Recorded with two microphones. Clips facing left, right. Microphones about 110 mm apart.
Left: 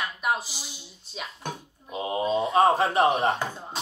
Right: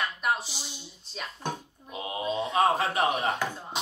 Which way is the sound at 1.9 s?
30° left (ahead or behind).